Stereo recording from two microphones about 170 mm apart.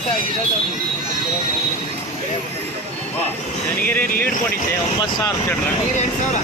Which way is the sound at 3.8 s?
10° left (ahead or behind).